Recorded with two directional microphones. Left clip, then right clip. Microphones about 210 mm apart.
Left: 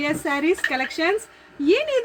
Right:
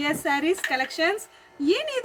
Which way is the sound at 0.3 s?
25° right (ahead or behind).